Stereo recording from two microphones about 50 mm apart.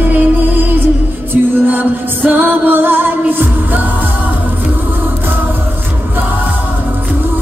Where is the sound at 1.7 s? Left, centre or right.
Right.